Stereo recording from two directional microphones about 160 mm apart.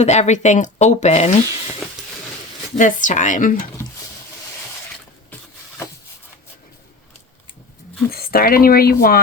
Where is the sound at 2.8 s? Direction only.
55° left (ahead or behind).